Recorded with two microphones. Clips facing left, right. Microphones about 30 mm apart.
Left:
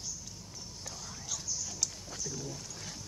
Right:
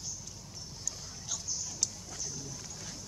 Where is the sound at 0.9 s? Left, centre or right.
Left.